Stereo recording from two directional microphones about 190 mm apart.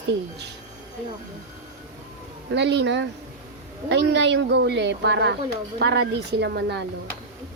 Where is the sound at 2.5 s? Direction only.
65° right (ahead or behind).